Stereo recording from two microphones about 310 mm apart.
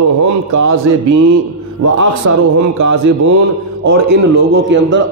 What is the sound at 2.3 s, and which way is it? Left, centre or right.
Speech, right.